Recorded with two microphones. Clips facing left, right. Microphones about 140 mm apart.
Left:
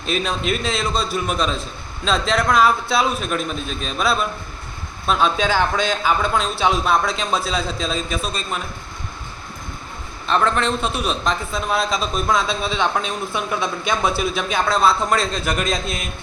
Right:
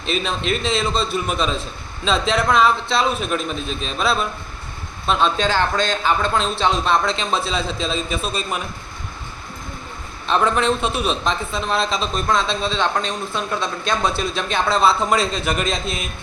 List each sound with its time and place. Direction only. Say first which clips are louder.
0.0 s a man's voice: left 1 dB; centre (ahead or behind)
10.2 s a man's voice: right 1 dB; centre (ahead or behind)